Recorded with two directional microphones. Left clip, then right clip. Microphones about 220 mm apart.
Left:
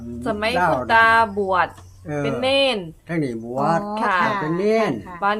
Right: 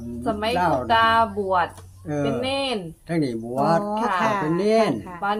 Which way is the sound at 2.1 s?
5° left (ahead or behind).